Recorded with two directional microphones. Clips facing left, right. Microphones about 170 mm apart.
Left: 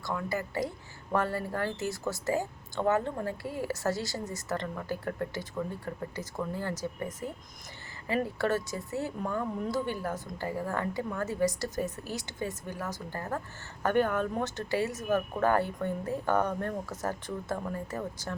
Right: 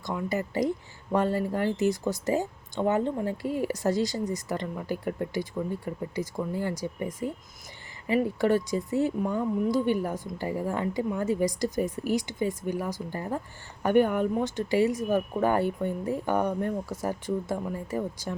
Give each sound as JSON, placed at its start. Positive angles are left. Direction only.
{"t": 0.0, "sound": "speech", "side_deg": -20}